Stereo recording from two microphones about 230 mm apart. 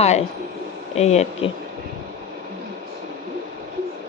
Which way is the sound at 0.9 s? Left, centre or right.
Left.